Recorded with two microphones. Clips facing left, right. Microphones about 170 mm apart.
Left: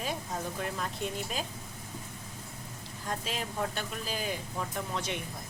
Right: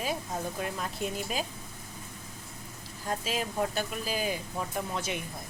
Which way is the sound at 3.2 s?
5° right (ahead or behind).